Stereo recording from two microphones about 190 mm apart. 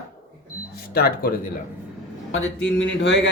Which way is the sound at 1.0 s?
55° left (ahead or behind).